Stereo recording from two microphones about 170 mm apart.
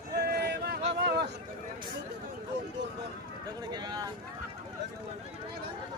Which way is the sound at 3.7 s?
25° right (ahead or behind).